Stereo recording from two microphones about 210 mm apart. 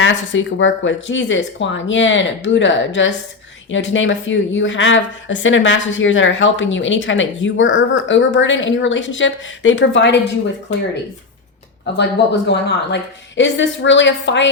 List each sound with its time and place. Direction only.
0.0 s a woman's voice: 65° left (ahead or behind)
11.9 s a woman's voice: 55° left (ahead or behind)